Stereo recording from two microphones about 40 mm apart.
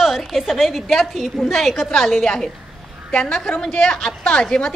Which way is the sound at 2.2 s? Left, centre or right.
Centre.